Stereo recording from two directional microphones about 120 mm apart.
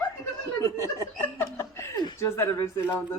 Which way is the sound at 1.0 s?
25° left (ahead or behind).